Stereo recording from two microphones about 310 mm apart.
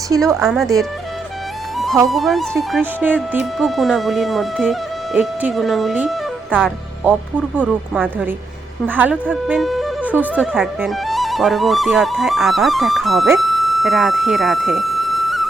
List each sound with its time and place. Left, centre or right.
0.3 s speech: centre
2.0 s speech: centre